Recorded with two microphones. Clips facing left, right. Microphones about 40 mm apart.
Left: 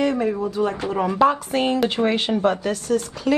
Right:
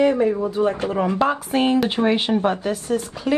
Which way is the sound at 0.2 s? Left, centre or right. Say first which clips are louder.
Right 3 dB; centre.